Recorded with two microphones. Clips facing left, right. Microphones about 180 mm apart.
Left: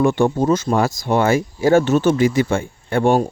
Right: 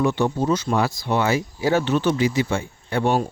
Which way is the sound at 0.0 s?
50° left (ahead or behind).